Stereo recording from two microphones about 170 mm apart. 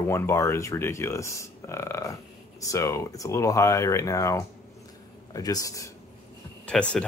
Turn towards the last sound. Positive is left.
turn(degrees=0)  # may be behind; listen again after turning